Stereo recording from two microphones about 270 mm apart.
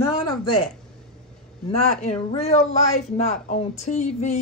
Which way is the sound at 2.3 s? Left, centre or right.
Left.